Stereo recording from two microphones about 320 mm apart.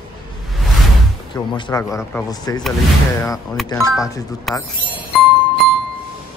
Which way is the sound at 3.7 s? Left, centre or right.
Centre.